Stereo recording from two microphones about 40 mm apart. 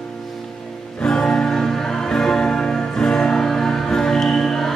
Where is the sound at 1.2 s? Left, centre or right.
Centre.